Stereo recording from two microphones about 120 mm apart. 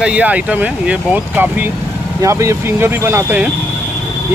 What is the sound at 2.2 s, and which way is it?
Speech, 25° right (ahead or behind).